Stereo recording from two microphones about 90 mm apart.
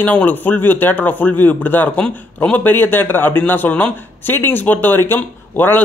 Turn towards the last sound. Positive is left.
turn(degrees=20)  # may be behind; listen again after turning